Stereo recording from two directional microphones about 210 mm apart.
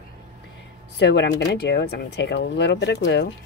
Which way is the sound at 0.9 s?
55° left (ahead or behind).